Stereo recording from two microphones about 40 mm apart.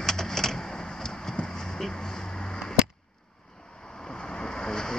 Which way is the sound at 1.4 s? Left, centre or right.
Left.